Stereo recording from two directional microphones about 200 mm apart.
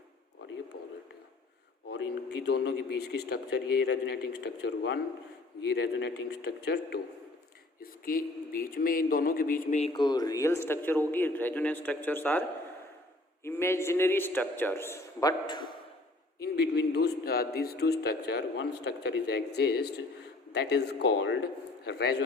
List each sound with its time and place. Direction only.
0.7 s speech: 55° left (ahead or behind)
2.5 s a man's voice: 55° left (ahead or behind); by 15.6 s 20° left (ahead or behind)
16.4 s speech: 55° left (ahead or behind)